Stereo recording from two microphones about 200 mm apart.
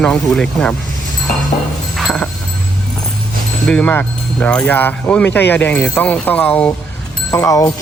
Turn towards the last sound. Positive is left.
turn(degrees=15)  # may be behind; listen again after turning